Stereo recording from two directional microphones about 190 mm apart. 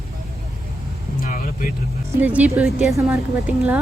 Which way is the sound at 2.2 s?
10° right (ahead or behind).